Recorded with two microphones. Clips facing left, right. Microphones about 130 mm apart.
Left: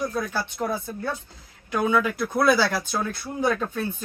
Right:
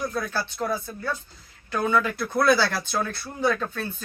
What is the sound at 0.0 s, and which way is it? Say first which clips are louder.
Speech: left 1 dB; 15° left (ahead or behind).